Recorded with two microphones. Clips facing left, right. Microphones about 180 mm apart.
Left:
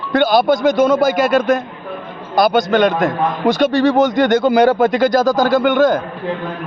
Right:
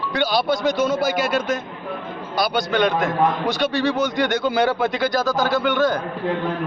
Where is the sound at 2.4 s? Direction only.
45° left (ahead or behind).